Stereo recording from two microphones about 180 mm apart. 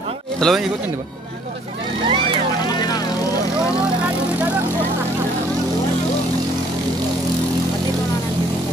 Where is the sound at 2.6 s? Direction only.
20° left (ahead or behind).